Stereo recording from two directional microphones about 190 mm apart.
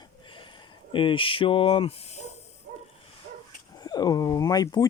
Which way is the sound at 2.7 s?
45° right (ahead or behind).